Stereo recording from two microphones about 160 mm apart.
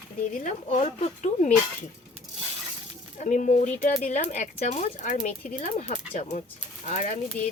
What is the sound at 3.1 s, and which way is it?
Speech, 55° left (ahead or behind).